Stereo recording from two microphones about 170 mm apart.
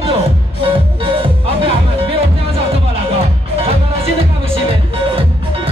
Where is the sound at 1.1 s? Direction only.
30° right (ahead or behind).